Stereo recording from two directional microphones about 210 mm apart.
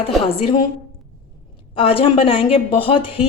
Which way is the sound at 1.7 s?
25° left (ahead or behind).